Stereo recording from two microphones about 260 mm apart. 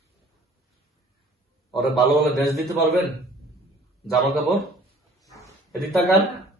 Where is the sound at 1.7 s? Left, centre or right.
Centre.